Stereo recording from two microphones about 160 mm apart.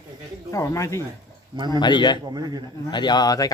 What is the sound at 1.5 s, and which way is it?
Speech, 25° right (ahead or behind).